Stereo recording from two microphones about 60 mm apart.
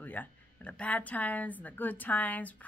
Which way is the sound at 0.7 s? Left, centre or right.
Left.